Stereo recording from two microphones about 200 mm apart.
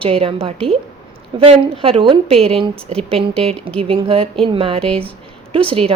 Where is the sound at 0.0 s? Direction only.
25° right (ahead or behind).